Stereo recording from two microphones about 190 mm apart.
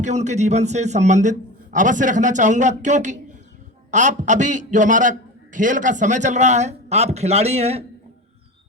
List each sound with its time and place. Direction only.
0.0 s a man's voice: 40° right (ahead or behind)